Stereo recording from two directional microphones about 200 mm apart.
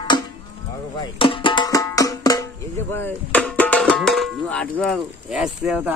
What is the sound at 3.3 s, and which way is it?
Tabla, 10° left (ahead or behind).